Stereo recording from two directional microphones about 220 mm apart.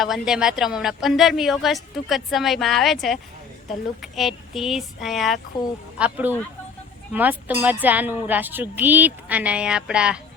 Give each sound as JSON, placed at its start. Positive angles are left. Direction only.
{"t": 0.0, "sound": "speech", "side_deg": 0}